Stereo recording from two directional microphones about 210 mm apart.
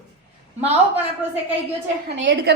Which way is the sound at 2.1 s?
60° right (ahead or behind).